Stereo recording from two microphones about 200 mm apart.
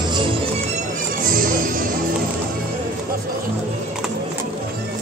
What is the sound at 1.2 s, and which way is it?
Music, 45° right (ahead or behind).